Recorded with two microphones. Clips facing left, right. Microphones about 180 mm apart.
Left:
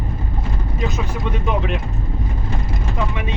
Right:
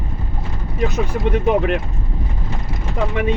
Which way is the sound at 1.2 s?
55° right (ahead or behind).